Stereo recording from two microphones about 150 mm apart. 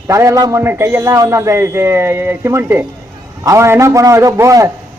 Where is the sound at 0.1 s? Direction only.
20° right (ahead or behind).